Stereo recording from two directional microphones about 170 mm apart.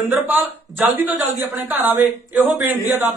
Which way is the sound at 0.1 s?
10° right (ahead or behind).